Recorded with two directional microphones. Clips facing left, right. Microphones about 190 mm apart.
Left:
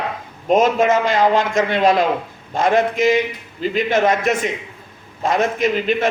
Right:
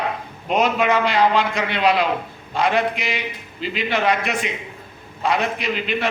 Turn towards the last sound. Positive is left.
turn(degrees=45)  # may be behind; listen again after turning